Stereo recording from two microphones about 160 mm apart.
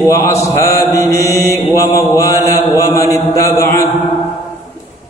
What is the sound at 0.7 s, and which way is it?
Mantra, 20° left (ahead or behind).